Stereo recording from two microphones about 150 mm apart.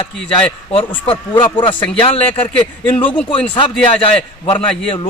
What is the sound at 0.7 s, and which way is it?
Speech, 40° left (ahead or behind).